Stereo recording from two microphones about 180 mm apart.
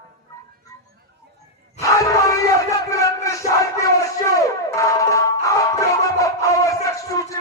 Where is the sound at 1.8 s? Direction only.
20° left (ahead or behind).